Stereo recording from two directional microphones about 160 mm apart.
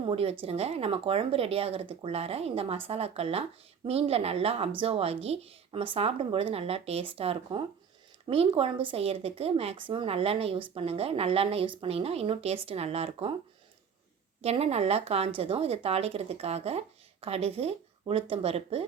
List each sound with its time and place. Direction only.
0.0 s a woman's voice: 35° right (ahead or behind)
14.4 s a woman's voice: 40° right (ahead or behind)